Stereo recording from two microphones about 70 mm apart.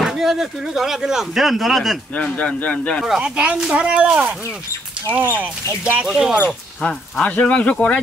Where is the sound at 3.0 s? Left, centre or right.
Centre.